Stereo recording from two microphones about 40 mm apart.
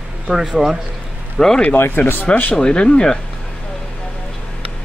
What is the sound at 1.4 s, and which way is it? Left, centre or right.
Speech, centre.